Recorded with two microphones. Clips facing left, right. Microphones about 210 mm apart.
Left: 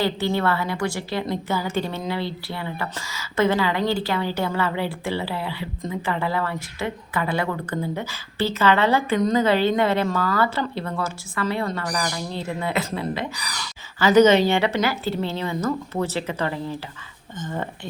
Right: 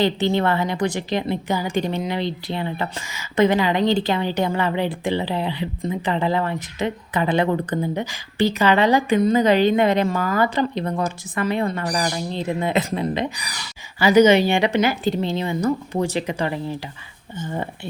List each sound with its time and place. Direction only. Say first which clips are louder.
0.0 s a woman's voice: right 3 dB; 20° right (ahead or behind)